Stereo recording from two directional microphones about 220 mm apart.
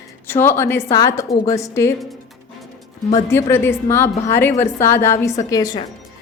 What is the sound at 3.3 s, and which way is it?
A woman's voice, 10° left (ahead or behind).